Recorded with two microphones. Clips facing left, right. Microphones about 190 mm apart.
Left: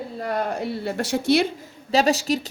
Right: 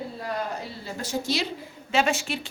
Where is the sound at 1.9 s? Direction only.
35° left (ahead or behind).